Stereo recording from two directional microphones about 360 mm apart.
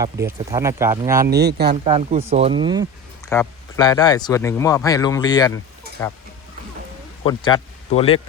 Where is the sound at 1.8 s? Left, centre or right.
Centre.